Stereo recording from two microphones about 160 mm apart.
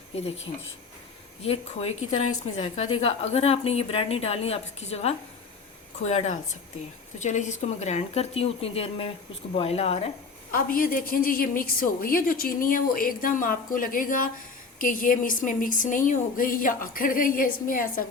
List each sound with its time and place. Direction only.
1.4 s a woman's voice: 40° left (ahead or behind)
10.5 s a woman's voice: 60° left (ahead or behind)